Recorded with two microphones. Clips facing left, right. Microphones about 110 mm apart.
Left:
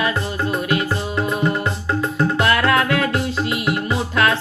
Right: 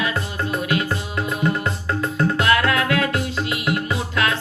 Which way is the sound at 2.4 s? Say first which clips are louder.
Left 2 dB; 35° left (ahead or behind).